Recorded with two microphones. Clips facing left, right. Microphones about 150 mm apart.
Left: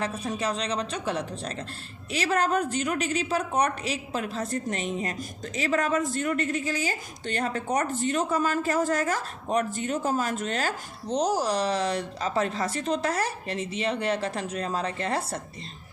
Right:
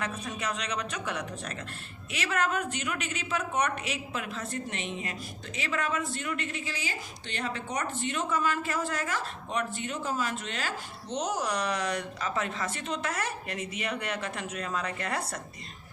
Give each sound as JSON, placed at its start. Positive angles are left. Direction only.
{"t": 0.0, "sound": "a woman's voice", "side_deg": 30}